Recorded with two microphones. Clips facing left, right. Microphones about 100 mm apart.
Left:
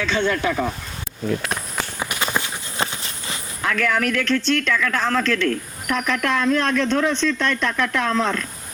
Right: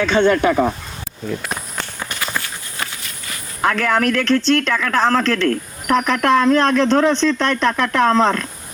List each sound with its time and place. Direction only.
0.0 s speech: 60° right (ahead or behind)
1.3 s walk: centre (ahead or behind)
2.0 s walk: 10° left (ahead or behind)
2.2 s walk: 20° left (ahead or behind)
3.8 s speech: 50° right (ahead or behind)
4.2 s speech: 75° right (ahead or behind)
4.7 s speech: 50° right (ahead or behind)
5.2 s speech: 40° right (ahead or behind)
5.9 s speech: 55° right (ahead or behind)
6.4 s speech: 65° right (ahead or behind)
7.5 s speech: 55° right (ahead or behind)